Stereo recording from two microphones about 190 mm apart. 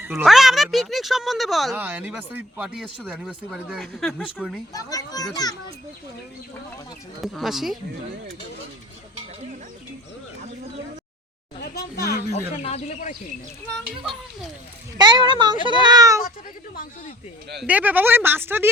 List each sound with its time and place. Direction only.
0.0 s speech: 5° right (ahead or behind)
4.7 s a child's voice: 20° left (ahead or behind)
7.2 s speech: centre (ahead or behind)
11.9 s speech: 55° left (ahead or behind)
12.6 s speech: 35° left (ahead or behind)
14.0 s speech: centre (ahead or behind)
14.9 s speech: 25° right (ahead or behind)
17.6 s speech: 10° right (ahead or behind)